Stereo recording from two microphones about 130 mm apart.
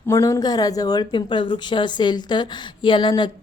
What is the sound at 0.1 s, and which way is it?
Speech, 25° left (ahead or behind).